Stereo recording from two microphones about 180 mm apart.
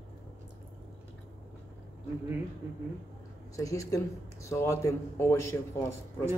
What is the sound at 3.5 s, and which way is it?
Speech, 15° left (ahead or behind).